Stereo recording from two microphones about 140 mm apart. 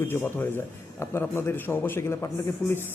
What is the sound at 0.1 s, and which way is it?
A man's voice, 15° left (ahead or behind).